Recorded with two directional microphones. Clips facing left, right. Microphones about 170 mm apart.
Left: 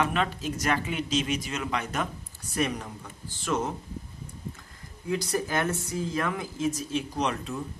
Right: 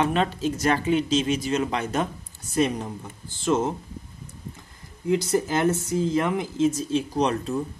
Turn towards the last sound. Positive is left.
turn(degrees=-35)  # may be behind; listen again after turning